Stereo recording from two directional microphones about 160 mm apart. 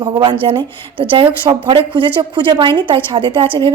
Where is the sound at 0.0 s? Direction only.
30° right (ahead or behind).